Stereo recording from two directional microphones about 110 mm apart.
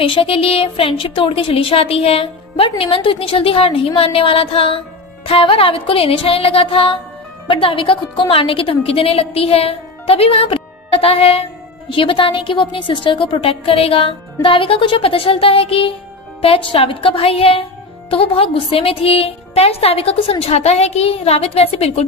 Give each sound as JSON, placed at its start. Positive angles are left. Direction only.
{"t": 0.0, "sound": "a woman's voice", "side_deg": 55}
{"t": 11.9, "sound": "a woman's voice", "side_deg": 50}